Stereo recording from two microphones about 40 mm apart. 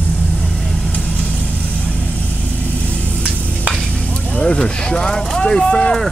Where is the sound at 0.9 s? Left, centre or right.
Left.